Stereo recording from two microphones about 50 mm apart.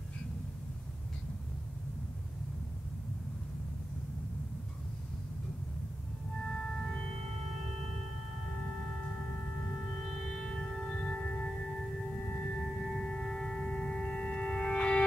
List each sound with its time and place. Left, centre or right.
6.5 s music: centre
9.8 s music: centre; by 11.5 s left
12.6 s music: centre